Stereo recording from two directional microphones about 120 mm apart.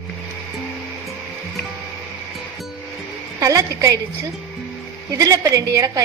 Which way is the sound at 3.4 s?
30° right (ahead or behind).